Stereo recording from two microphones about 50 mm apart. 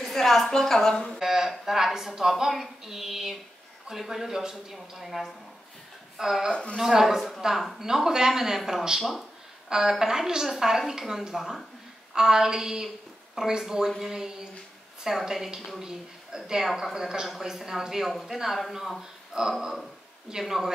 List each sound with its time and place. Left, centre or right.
0.0 s a woman's voice: centre
1.2 s a woman's voice: centre
6.5 s speech: left
6.8 s a woman's voice: centre